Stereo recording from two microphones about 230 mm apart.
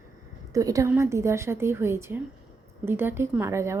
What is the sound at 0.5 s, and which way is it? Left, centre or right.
A woman's voice, centre.